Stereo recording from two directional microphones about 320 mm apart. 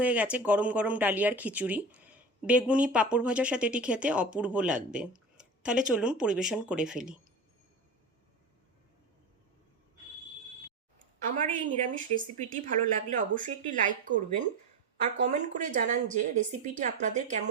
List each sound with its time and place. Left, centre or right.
0.0 s speech: centre
11.3 s speech: right